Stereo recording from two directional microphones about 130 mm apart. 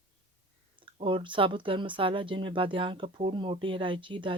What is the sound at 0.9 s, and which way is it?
Speech, 40° right (ahead or behind).